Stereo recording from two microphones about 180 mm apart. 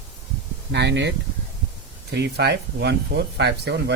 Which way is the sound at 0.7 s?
75° right (ahead or behind).